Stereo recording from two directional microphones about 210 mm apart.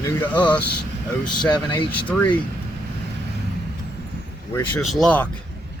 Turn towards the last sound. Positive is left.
turn(degrees=5)  # may be behind; listen again after turning